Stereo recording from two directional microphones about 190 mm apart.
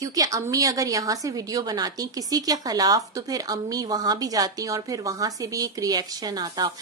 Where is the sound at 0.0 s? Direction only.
15° right (ahead or behind).